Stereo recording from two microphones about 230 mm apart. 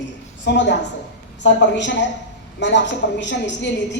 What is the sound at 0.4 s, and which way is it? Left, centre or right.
A woman's voice, left.